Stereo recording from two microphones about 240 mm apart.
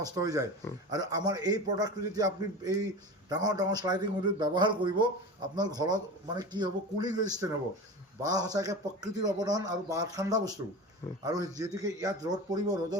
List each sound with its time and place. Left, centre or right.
0.0 s a man's voice: centre